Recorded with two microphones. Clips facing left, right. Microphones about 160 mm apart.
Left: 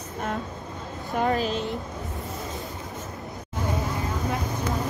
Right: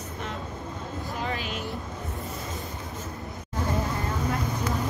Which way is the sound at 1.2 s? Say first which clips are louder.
Left 10 dB; 40° left (ahead or behind).